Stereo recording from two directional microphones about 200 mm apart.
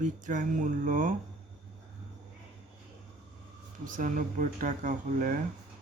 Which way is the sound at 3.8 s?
40° right (ahead or behind).